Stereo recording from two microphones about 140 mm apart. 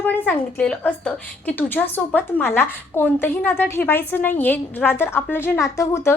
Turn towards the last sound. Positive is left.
turn(degrees=20)  # may be behind; listen again after turning